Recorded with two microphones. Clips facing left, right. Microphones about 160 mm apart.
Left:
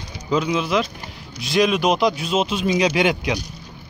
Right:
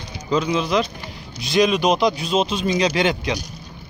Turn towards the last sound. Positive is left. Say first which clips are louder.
# left 1 dB
turn(degrees=10)  # may be behind; listen again after turning